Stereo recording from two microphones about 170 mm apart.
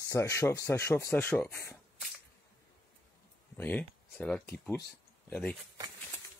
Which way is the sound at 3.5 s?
10° left (ahead or behind).